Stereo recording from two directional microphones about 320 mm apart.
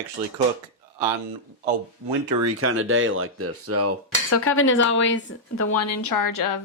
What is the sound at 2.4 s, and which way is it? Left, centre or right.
Speech, right.